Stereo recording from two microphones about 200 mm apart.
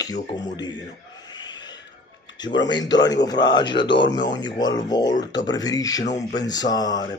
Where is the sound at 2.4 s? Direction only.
20° left (ahead or behind).